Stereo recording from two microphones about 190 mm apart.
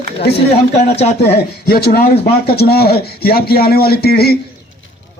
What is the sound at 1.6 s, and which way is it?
Speech, 55° left (ahead or behind).